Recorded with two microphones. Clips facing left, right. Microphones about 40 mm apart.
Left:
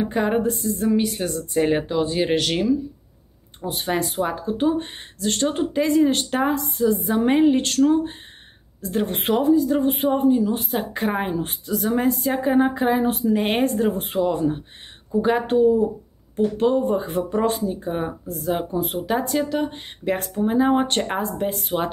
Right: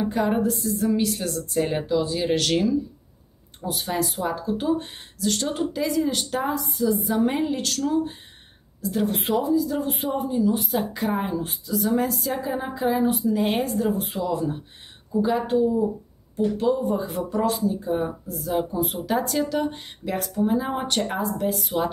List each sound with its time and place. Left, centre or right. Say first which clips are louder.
0.0 s speech: left 2 dB; left
2.3 s speech: even; centre
3.6 s speech: left 2 dB; left
11.9 s speech: left 5 dB; left
19.1 s speech: left 1 dB; centre
20.2 s speech: left 1 dB; left